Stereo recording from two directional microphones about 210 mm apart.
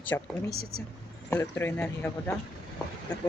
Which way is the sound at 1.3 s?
10° left (ahead or behind).